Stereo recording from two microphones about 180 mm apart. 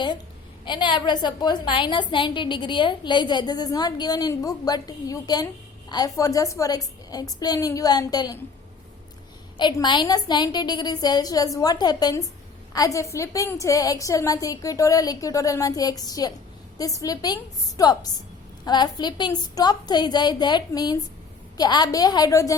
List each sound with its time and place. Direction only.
0.6 s a woman's voice: 25° left (ahead or behind)
9.6 s a woman's voice: 25° left (ahead or behind)